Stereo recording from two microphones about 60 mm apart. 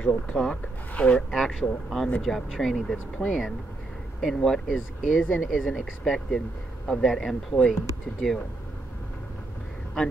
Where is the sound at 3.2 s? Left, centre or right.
Left.